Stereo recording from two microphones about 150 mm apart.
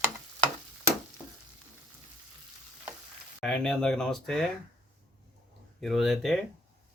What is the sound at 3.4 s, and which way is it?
Speech, 5° left (ahead or behind).